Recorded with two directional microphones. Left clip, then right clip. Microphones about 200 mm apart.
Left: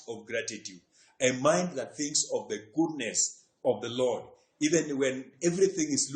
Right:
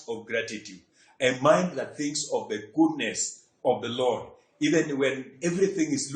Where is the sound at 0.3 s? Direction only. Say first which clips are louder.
Right 3 dB; 45° left (ahead or behind).